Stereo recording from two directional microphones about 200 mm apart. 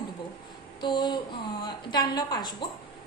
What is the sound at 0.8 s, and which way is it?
A woman's voice, 20° left (ahead or behind).